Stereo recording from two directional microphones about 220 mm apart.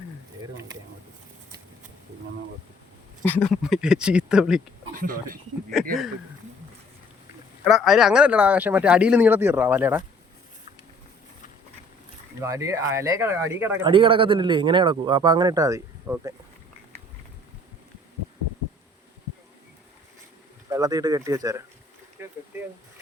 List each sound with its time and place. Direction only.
3.2 s speech: 5° left (ahead or behind)
5.7 s speech: centre (ahead or behind)
7.6 s speech: centre (ahead or behind)
12.4 s speech: 15° right (ahead or behind)
13.8 s speech: 25° right (ahead or behind)
20.7 s speech: 15° right (ahead or behind)